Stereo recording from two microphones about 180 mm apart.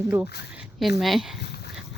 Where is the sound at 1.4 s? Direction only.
65° left (ahead or behind).